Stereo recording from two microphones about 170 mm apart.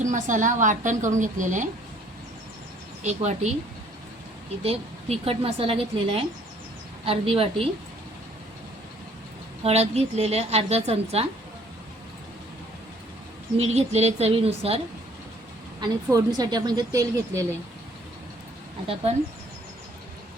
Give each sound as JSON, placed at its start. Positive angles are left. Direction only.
{"t": 0.0, "sound": "a woman's voice", "side_deg": -50}
{"t": 3.0, "sound": "a woman's voice", "side_deg": -40}
{"t": 4.6, "sound": "a woman's voice", "side_deg": -35}
{"t": 9.6, "sound": "a woman's voice", "side_deg": -40}
{"t": 13.6, "sound": "a woman's voice", "side_deg": -40}
{"t": 15.8, "sound": "speech", "side_deg": -20}